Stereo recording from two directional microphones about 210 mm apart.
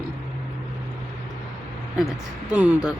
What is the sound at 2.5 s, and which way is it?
Speech, 5° right (ahead or behind).